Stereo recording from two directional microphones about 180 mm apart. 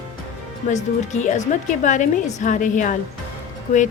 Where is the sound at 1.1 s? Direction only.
40° left (ahead or behind).